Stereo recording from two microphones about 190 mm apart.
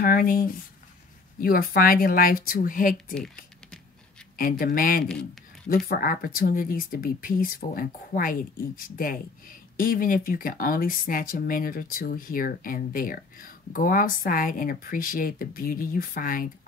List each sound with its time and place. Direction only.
0.0 s speech: 50° left (ahead or behind)
4.4 s speech: 45° left (ahead or behind)
5.0 s a sound: 5° left (ahead or behind)
5.9 s speech: 45° left (ahead or behind)